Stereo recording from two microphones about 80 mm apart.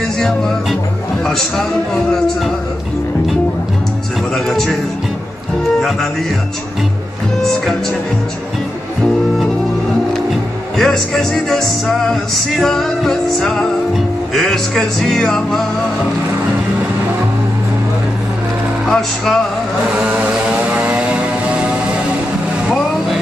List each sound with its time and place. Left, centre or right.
0.2 s music: centre
4.5 s music: centre
5.8 s music: centre
10.8 s music: centre
18.9 s music: centre
20.8 s vehicle: centre